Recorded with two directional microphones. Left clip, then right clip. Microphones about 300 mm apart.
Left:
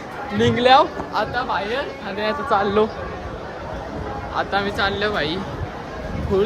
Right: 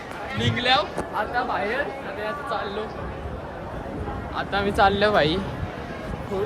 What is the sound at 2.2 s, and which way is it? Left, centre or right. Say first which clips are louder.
Speech: left 9 dB; left.